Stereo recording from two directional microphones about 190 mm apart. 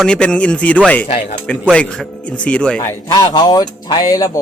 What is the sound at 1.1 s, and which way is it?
Speech, 30° left (ahead or behind).